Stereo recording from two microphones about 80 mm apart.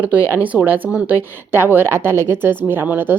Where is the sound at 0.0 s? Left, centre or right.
Centre.